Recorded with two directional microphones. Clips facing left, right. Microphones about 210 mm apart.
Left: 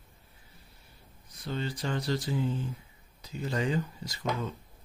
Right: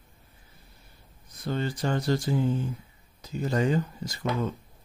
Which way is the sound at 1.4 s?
50° right (ahead or behind).